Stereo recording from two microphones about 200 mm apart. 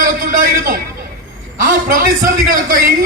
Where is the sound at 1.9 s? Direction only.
40° right (ahead or behind).